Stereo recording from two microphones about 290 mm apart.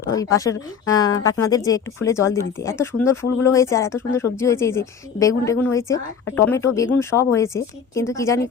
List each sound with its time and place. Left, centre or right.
0.1 s a woman's voice: centre